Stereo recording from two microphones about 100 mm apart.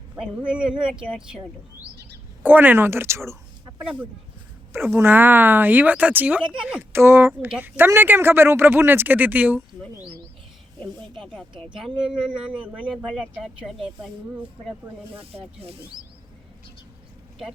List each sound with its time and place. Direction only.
0.2 s speech: 10° right (ahead or behind)
2.4 s speech: 20° right (ahead or behind)
4.9 s speech: 20° right (ahead or behind)
6.9 s speech: 25° right (ahead or behind)
11.2 s speech: 5° left (ahead or behind)
11.8 s speech: 10° right (ahead or behind)
15.2 s speech: 75° right (ahead or behind)